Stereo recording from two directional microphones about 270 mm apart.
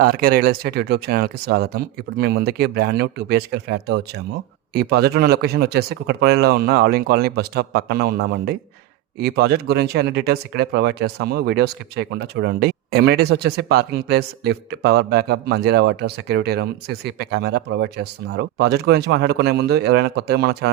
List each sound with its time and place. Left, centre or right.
0.0 s speech: right